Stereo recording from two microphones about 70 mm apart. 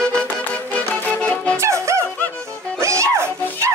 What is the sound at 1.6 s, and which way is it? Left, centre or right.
Music, right.